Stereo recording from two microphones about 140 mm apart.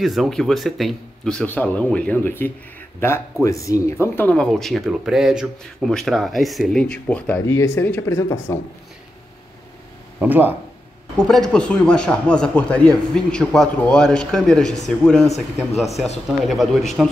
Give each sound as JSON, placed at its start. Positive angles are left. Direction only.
{"t": 0.0, "sound": "speech", "side_deg": 0}
{"t": 7.4, "sound": "speech", "side_deg": 20}
{"t": 10.1, "sound": "speech", "side_deg": -10}
{"t": 11.1, "sound": "speech", "side_deg": 5}